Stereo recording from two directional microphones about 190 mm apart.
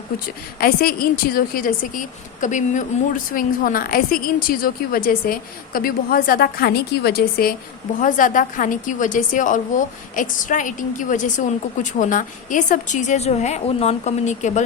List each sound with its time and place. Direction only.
0.6 s a woman's voice: 50° left (ahead or behind)